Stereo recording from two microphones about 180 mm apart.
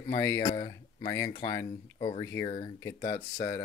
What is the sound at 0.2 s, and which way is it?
Speech, 15° left (ahead or behind).